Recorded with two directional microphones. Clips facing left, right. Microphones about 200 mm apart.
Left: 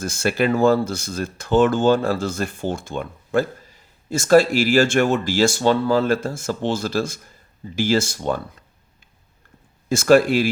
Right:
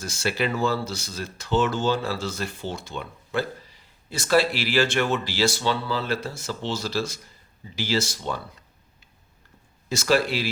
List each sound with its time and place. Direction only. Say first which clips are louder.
0.0 s speech: left 6 dB; 50° left (ahead or behind)
9.9 s speech: left 8 dB; 50° left (ahead or behind)